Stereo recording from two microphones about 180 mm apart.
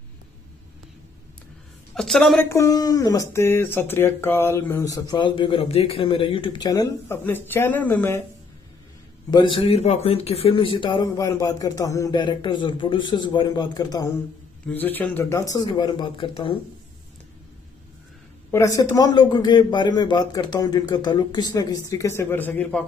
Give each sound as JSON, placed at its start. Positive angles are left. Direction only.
{"t": 2.0, "sound": "a woman's voice", "side_deg": 0}
{"t": 2.5, "sound": "speech", "side_deg": 20}
{"t": 9.3, "sound": "speech", "side_deg": 25}
{"t": 14.7, "sound": "speech", "side_deg": 10}
{"t": 18.5, "sound": "speech", "side_deg": 15}